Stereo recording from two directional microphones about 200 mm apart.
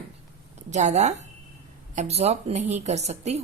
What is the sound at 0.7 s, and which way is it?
Speech, 35° right (ahead or behind).